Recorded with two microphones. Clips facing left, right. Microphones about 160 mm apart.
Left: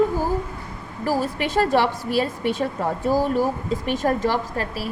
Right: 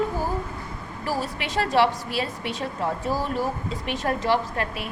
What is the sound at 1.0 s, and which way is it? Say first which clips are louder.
A woman's voice: left 6 dB; 45° left (ahead or behind).